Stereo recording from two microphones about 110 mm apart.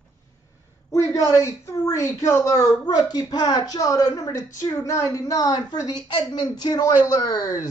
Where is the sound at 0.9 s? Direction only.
25° left (ahead or behind).